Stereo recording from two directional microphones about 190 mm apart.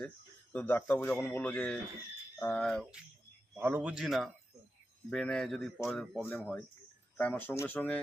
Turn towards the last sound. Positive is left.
turn(degrees=10)  # may be behind; listen again after turning